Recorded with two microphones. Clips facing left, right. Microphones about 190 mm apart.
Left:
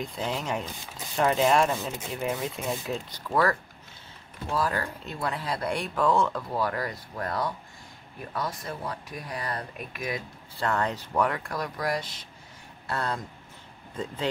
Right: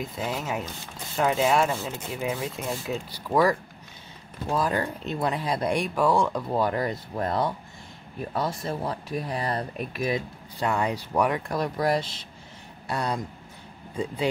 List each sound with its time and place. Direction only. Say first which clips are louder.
0.0 s speech: right 1 dB; 5° right (ahead or behind)
4.6 s speech: right 2 dB; 20° right (ahead or behind)
10.6 s speech: right 2 dB; 10° right (ahead or behind); by 12.3 s 30° right (ahead or behind)
12.8 s speech: right 2 dB; 15° right (ahead or behind)